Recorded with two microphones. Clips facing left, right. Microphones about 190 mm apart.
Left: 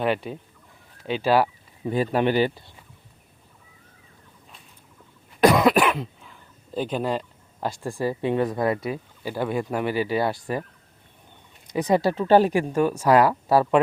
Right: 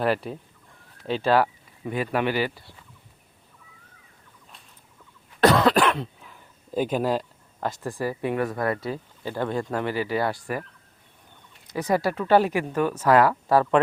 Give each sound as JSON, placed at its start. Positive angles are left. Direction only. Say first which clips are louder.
{"t": 1.0, "sound": "speech", "louder": "left 1 dB", "side_deg": 5}
{"t": 1.8, "sound": "speech", "louder": "left 3 dB", "side_deg": 30}
{"t": 5.4, "sound": "cough", "louder": "left 1 dB", "side_deg": 10}
{"t": 6.7, "sound": "speech", "louder": "right 2 dB", "side_deg": -5}
{"t": 7.9, "sound": "speech", "louder": "left 4 dB", "side_deg": 25}
{"t": 11.7, "sound": "speech", "louder": "left 3 dB", "side_deg": 20}
{"t": 12.6, "sound": "speech", "louder": "left 2 dB", "side_deg": 15}